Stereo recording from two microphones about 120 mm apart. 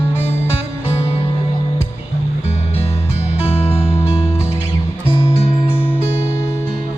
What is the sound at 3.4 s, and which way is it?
Music, 55° left (ahead or behind).